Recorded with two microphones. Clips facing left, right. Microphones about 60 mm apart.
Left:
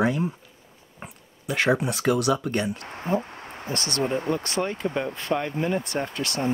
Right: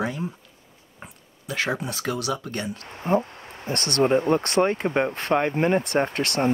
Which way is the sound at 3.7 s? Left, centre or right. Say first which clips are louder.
Right 6 dB; right.